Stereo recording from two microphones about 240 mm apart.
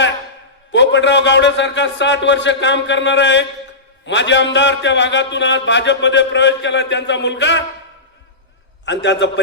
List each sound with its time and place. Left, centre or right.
0.7 s a man's voice: left
8.8 s a man's voice: left